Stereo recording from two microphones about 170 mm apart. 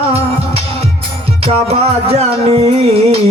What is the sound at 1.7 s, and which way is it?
Music, 35° right (ahead or behind).